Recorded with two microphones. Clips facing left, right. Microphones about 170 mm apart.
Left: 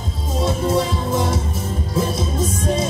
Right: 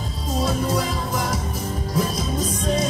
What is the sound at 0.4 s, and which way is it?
Music, 25° left (ahead or behind).